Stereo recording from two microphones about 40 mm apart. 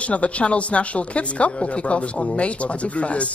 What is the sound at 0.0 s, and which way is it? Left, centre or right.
A woman's voice, left.